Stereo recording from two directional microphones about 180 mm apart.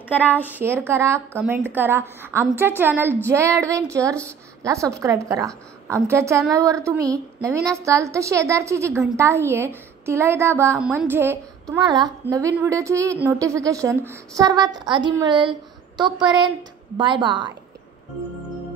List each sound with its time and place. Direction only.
0.1 s a woman's voice: 10° left (ahead or behind)
0.5 s a woman's voice: 10° right (ahead or behind); by 17.6 s 25° right (ahead or behind)